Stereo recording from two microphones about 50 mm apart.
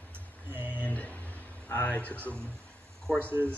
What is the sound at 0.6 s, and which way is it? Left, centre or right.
Speech, left.